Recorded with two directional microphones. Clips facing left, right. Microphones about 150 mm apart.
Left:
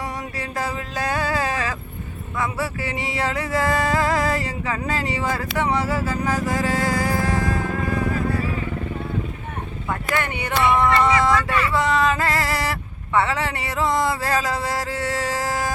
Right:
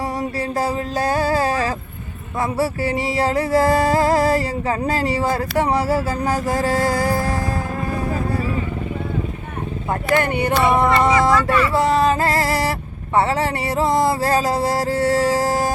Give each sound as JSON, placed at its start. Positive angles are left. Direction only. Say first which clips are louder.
{"t": 0.3, "sound": "music", "louder": "right 6 dB", "side_deg": -35}
{"t": 9.9, "sound": "music", "louder": "right 6 dB", "side_deg": -40}